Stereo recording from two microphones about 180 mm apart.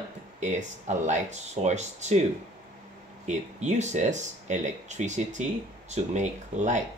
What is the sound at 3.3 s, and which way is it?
Speech, 40° right (ahead or behind).